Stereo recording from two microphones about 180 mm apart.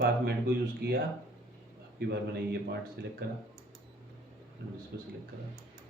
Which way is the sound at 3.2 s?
60° right (ahead or behind).